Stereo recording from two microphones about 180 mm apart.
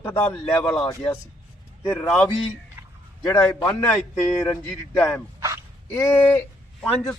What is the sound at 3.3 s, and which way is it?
Speech, 15° left (ahead or behind).